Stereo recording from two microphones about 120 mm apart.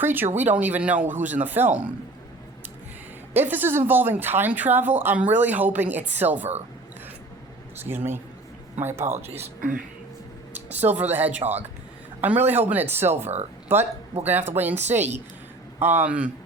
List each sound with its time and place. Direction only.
0.0 s speech: 15° right (ahead or behind)
3.3 s speech: 15° right (ahead or behind)
7.9 s speech: 20° right (ahead or behind)
10.5 s a sound: 15° right (ahead or behind)
11.1 s speech: 15° right (ahead or behind)
14.9 s a woman's voice: 70° right (ahead or behind)
15.8 s speech: 20° right (ahead or behind)